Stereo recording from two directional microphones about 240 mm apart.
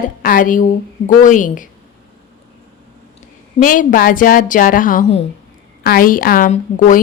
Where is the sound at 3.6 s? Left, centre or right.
Left.